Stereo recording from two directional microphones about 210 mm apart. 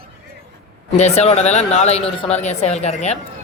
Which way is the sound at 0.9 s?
30° left (ahead or behind).